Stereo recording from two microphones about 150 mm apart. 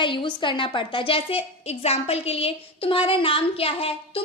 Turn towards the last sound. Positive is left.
turn(degrees=40)  # may be behind; listen again after turning